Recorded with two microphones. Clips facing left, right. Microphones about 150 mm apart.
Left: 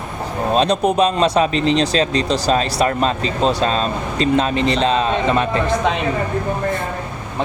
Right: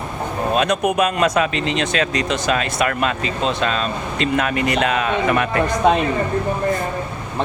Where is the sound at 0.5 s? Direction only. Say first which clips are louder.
Left 3 dB; 30° left (ahead or behind).